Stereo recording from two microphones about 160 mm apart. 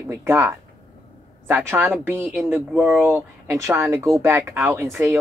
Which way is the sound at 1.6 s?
15° right (ahead or behind).